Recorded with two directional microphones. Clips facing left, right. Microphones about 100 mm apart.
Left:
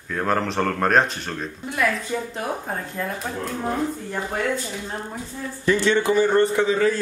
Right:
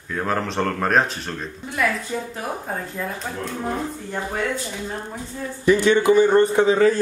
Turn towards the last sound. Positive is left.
turn(degrees=-35)  # may be behind; listen again after turning